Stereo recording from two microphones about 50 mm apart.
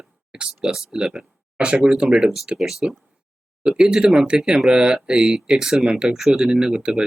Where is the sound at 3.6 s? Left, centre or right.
Centre.